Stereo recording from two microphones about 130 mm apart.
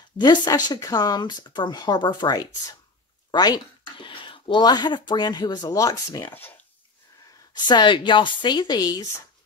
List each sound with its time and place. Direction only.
0.2 s speech: 35° left (ahead or behind)
6.2 s speech: 15° left (ahead or behind)
7.5 s speech: 35° left (ahead or behind)